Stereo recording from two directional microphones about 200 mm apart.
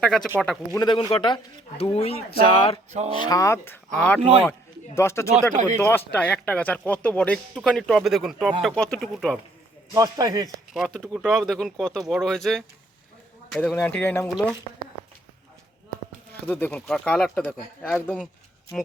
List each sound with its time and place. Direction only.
0.0 s speech: centre (ahead or behind)
0.8 s speech: 25° left (ahead or behind)
3.2 s speech: 15° left (ahead or behind)
4.2 s speech: 30° right (ahead or behind)
4.9 s speech: 15° left (ahead or behind)
9.9 s speech: 15° right (ahead or behind)
10.8 s speech: centre (ahead or behind)
14.3 s speech: centre (ahead or behind)
16.5 s speech: 10° left (ahead or behind)